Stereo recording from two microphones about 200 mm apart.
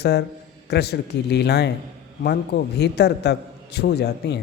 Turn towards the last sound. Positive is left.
turn(degrees=55)  # may be behind; listen again after turning